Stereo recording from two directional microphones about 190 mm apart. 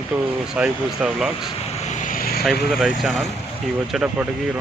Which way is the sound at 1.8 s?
45° left (ahead or behind).